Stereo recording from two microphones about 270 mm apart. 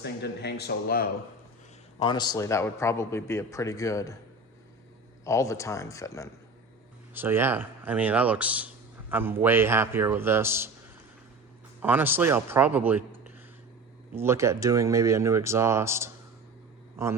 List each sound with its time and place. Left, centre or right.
0.0 s speech: left
2.0 s a man's voice: centre
5.2 s a man's voice: centre
7.1 s a man's voice: centre
11.8 s a man's voice: centre